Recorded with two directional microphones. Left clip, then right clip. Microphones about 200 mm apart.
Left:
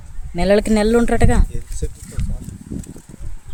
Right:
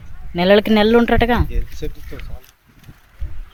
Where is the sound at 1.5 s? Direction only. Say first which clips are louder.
Right 2 dB; 40° left (ahead or behind).